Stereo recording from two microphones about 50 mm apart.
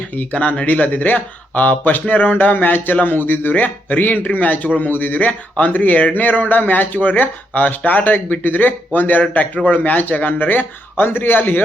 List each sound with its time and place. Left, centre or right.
0.2 s speech: left